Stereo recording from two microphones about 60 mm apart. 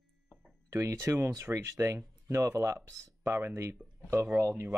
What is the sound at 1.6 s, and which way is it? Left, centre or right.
Speech, right.